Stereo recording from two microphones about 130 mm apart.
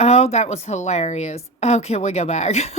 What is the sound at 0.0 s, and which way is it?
A woman's voice, 55° left (ahead or behind).